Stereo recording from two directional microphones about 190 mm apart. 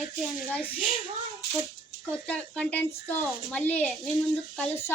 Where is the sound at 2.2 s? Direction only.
5° left (ahead or behind).